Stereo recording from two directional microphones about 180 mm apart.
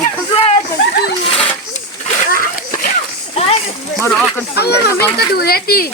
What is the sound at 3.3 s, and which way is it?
Children playing, 35° left (ahead or behind).